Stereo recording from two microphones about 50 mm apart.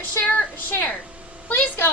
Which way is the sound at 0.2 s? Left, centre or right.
Left.